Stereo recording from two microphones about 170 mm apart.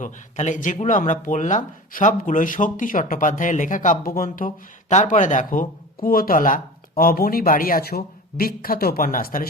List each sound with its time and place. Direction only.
0.0 s speech: 45° left (ahead or behind)